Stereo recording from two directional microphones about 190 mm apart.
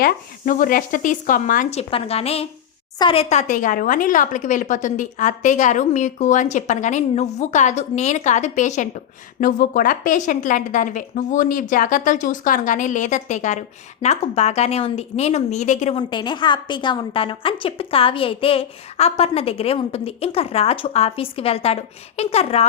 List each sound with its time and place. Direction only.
0.0 s speech: 45° left (ahead or behind)
1.9 s a woman's voice: 30° left (ahead or behind)
16.0 s a woman's voice: 25° left (ahead or behind)